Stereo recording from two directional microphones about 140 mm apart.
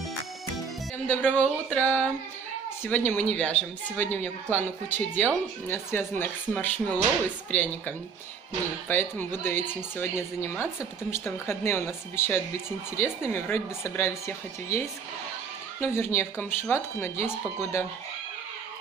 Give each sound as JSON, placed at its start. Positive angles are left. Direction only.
{"t": 1.0, "sound": "a woman's voice", "side_deg": 10}
{"t": 3.1, "sound": "a woman's voice", "side_deg": 10}